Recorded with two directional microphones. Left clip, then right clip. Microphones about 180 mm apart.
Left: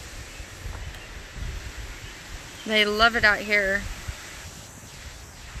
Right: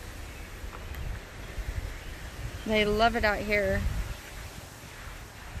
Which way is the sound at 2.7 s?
Centre (ahead or behind).